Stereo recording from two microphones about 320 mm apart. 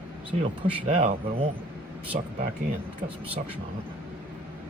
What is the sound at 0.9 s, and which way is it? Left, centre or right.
Speech, right.